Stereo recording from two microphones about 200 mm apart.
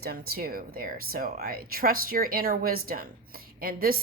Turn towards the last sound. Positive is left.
turn(degrees=-45)  # may be behind; listen again after turning